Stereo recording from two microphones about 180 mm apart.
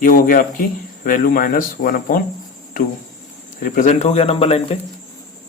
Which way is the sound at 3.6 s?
45° left (ahead or behind).